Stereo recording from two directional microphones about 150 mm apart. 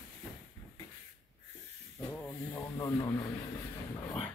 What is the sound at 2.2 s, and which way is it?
Speech, 20° left (ahead or behind).